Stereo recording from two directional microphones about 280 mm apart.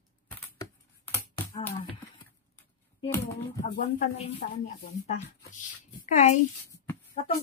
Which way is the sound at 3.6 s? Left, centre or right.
Left.